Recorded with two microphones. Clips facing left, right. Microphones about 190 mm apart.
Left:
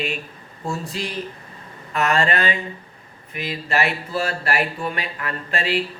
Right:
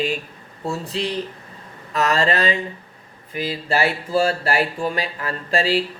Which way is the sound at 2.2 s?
30° right (ahead or behind).